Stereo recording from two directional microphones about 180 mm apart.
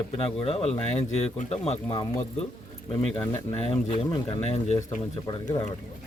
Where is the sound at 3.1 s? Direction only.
15° left (ahead or behind).